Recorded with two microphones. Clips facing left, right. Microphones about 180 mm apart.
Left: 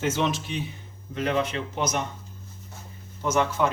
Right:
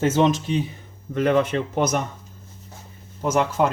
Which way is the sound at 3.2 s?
40° right (ahead or behind).